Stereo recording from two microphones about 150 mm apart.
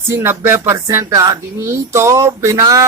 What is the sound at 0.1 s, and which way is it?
Speech, 15° right (ahead or behind).